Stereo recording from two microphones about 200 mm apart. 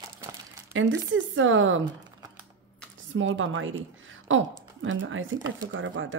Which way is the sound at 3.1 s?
75° right (ahead or behind).